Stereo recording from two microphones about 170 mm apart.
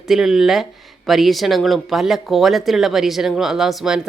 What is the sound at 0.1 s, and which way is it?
Speech, centre (ahead or behind).